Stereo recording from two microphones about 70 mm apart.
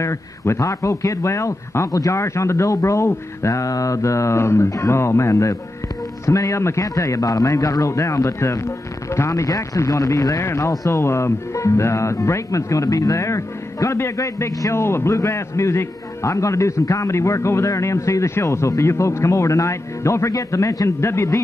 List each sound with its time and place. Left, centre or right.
0.0 s speech: left
1.9 s speech: left
2.1 s speech: left
10.4 s speech: left